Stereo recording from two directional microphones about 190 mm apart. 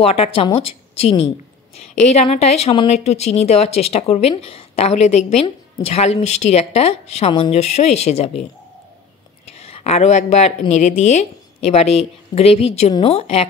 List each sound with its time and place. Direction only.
0.0 s speech: 30° left (ahead or behind)
9.5 s speech: 30° left (ahead or behind)